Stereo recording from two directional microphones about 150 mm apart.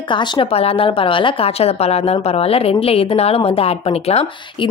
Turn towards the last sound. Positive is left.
turn(degrees=40)  # may be behind; listen again after turning